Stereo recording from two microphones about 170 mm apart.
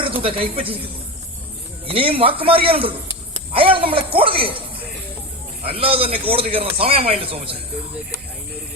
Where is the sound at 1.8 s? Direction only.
30° right (ahead or behind).